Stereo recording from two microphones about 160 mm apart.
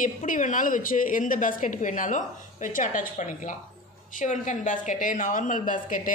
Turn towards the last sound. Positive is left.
turn(degrees=55)  # may be behind; listen again after turning